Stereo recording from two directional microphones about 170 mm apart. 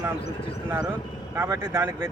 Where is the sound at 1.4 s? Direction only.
15° right (ahead or behind).